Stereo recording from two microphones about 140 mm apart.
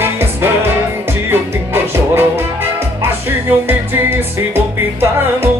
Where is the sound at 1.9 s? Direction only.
15° right (ahead or behind).